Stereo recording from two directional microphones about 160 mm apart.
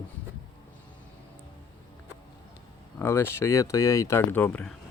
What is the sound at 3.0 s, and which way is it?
Speech, 15° left (ahead or behind).